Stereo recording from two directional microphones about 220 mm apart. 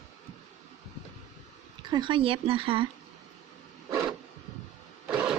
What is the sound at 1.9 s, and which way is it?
Speech, 20° right (ahead or behind).